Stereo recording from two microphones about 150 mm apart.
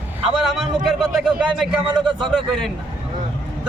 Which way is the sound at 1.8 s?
30° right (ahead or behind).